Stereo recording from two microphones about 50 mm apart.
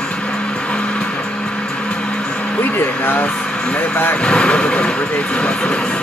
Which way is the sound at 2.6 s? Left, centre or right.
Left.